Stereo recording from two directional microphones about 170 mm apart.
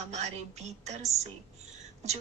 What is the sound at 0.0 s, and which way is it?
A woman's voice, 40° right (ahead or behind).